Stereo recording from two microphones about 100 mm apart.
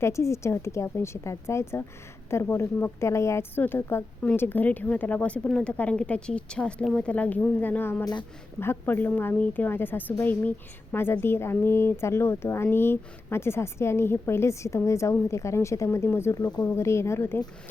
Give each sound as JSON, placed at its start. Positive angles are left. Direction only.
{"t": 0.0, "sound": "a woman's voice", "side_deg": 30}
{"t": 16.5, "sound": "speech", "side_deg": 10}
{"t": 16.7, "sound": "speech", "side_deg": 25}